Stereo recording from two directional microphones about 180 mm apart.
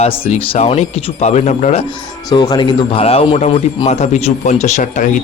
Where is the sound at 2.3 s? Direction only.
20° left (ahead or behind); by 5.0 s 40° left (ahead or behind).